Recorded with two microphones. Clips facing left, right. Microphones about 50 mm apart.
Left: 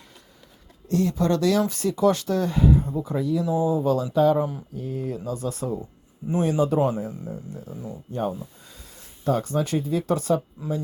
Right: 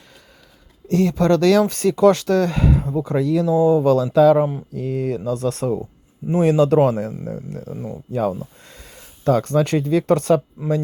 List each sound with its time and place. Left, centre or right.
0.9 s speech: right
7.3 s speech: right
7.8 s speech: right